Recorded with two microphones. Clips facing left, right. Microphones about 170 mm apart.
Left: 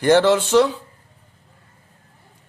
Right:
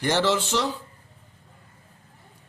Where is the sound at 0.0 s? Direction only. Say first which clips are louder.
Left 8 dB; 55° left (ahead or behind).